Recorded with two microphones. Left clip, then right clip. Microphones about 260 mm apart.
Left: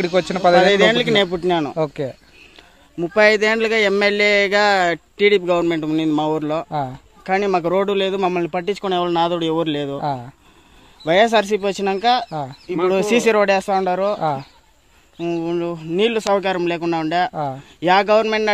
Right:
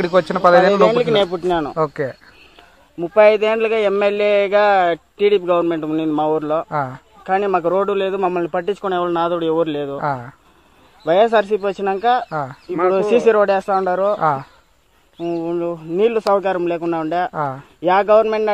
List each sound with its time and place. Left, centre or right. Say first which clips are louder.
0.0 s speech: right 2 dB; centre
0.8 s speech: right 1 dB; left
3.0 s speech: right 2 dB; left
6.7 s speech: right 2 dB; centre
7.2 s speech: right 1 dB; left
10.0 s speech: right 2 dB; centre
11.1 s speech: right 1 dB; left
12.3 s speech: right 3 dB; centre
12.6 s speech: right 1 dB; left
15.1 s speech: even; left
17.3 s speech: right 2 dB; centre
17.7 s speech: right 2 dB; left